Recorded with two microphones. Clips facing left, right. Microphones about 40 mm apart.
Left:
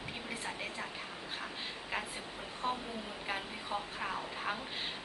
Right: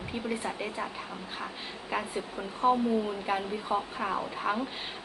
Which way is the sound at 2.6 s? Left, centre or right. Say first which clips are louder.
Right 12 dB; centre.